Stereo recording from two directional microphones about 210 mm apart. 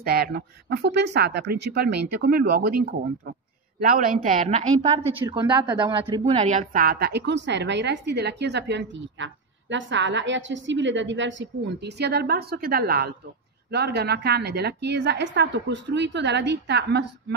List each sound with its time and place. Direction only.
0.0 s a woman's voice: 50° right (ahead or behind)
5.2 s a woman's voice: 20° right (ahead or behind); by 17.1 s 55° right (ahead or behind)